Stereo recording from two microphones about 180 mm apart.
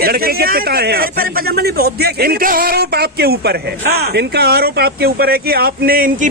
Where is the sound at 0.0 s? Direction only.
55° right (ahead or behind).